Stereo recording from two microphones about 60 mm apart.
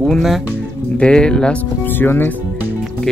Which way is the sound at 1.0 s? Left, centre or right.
Centre.